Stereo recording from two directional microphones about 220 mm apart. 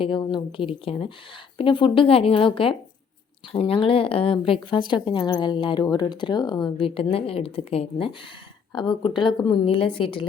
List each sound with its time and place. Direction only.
0.0 s speech: 20° left (ahead or behind)